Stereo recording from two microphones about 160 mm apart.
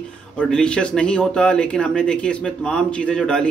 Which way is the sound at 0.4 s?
5° left (ahead or behind).